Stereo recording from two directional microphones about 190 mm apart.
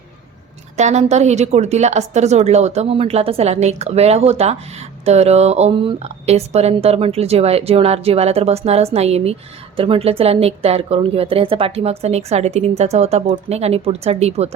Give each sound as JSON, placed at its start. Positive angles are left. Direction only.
{"t": 0.8, "sound": "a woman's voice", "side_deg": -35}